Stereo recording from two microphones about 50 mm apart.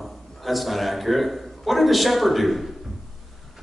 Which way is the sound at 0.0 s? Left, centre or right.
Centre.